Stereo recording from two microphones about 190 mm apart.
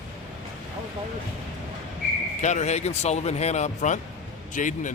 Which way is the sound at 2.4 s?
40° left (ahead or behind).